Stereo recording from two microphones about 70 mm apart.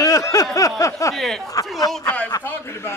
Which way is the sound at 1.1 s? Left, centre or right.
Centre.